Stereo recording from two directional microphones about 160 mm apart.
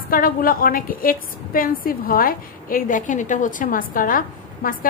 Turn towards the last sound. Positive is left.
turn(degrees=60)  # may be behind; listen again after turning